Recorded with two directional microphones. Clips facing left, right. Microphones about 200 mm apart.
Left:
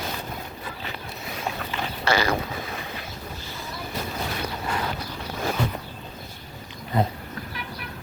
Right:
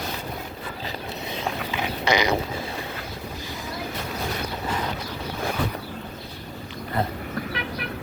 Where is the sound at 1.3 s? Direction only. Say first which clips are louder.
Right 1 dB; 15° right (ahead or behind).